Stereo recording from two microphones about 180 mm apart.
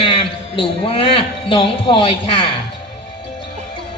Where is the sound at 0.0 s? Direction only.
30° left (ahead or behind).